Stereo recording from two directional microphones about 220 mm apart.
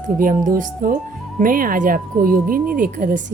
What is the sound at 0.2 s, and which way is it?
Speech, 40° right (ahead or behind).